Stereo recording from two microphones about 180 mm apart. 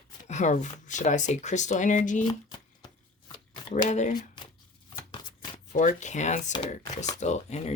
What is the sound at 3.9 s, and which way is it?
Speech, 40° left (ahead or behind).